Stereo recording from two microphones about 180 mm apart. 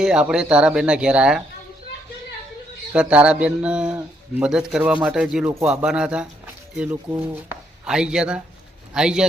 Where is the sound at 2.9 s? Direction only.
5° right (ahead or behind).